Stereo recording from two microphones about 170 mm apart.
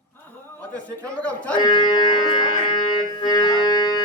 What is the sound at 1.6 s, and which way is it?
Music, 25° left (ahead or behind).